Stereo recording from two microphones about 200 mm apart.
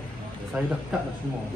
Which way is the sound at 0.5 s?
5° right (ahead or behind).